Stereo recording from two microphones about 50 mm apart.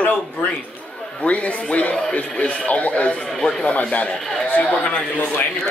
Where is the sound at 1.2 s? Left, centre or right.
Left.